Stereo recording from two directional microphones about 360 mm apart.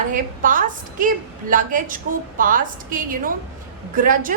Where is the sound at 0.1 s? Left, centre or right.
Right.